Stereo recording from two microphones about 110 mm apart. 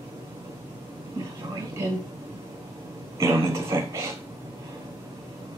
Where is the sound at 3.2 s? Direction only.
25° right (ahead or behind).